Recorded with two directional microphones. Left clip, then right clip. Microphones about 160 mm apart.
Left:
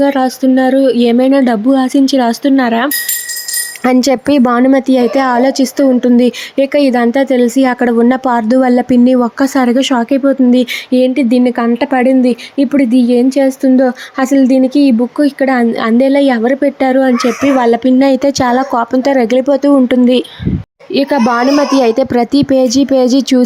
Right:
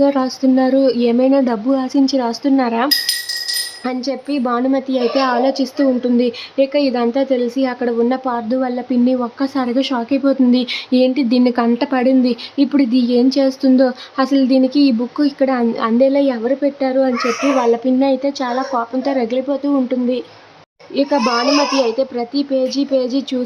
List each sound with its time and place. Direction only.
0.0 s a woman's voice: 30° left (ahead or behind)
3.8 s a woman's voice: 65° left (ahead or behind)